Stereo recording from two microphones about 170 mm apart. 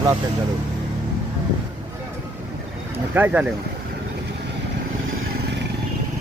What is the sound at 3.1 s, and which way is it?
Speech, 10° right (ahead or behind).